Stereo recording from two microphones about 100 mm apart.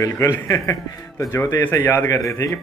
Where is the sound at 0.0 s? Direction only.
30° left (ahead or behind).